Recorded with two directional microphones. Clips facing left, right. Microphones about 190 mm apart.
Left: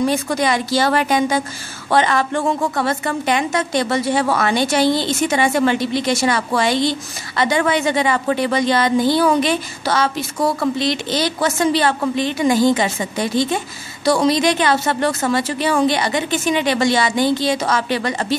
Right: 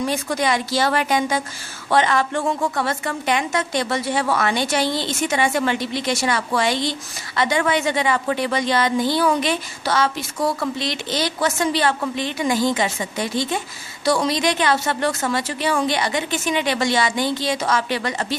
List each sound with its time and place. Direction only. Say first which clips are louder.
0.1 s a woman's voice: left 3 dB; 40° left (ahead or behind)